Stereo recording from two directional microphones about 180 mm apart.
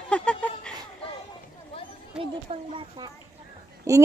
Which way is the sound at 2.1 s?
30° right (ahead or behind).